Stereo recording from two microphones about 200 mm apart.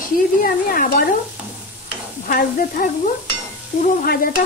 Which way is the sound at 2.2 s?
45° left (ahead or behind).